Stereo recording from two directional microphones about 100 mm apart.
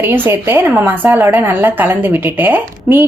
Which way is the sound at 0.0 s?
20° right (ahead or behind).